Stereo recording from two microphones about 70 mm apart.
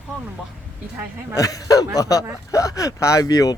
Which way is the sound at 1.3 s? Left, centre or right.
Left.